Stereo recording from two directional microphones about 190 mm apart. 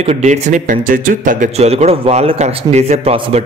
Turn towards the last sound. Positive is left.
turn(degrees=-35)  # may be behind; listen again after turning